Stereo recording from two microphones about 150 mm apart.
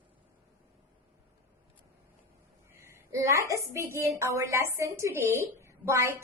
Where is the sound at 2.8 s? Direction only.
20° right (ahead or behind).